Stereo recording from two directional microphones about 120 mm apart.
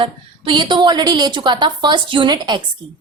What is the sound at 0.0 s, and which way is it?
A woman's voice, 40° right (ahead or behind).